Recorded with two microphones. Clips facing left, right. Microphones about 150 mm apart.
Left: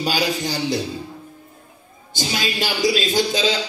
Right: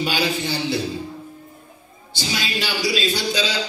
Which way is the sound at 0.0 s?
40° left (ahead or behind).